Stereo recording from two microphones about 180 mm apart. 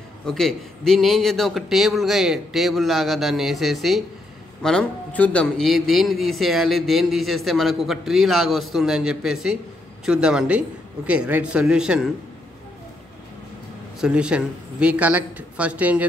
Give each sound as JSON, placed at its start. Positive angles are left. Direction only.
{"t": 0.3, "sound": "a man's voice", "side_deg": 0}
{"t": 14.0, "sound": "speech", "side_deg": -5}